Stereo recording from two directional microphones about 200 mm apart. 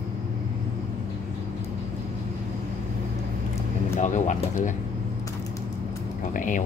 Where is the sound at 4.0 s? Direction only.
35° left (ahead or behind).